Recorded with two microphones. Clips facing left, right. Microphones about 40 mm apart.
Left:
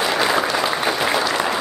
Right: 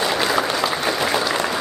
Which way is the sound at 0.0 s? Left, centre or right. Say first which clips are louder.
Left 1 dB; centre.